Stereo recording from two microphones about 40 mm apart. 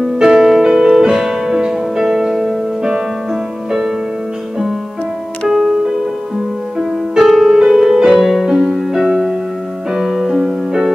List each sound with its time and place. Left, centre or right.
0.2 s music: centre
5.5 s music: centre
8.2 s music: centre
8.5 s music: centre